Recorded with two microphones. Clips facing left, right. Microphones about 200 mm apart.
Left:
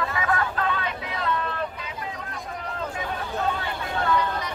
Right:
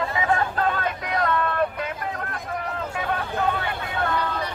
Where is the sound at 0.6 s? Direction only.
45° right (ahead or behind).